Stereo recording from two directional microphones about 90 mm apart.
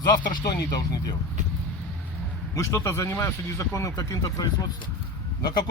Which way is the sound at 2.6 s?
35° left (ahead or behind).